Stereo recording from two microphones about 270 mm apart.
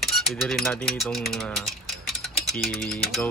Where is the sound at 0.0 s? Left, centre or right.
Centre.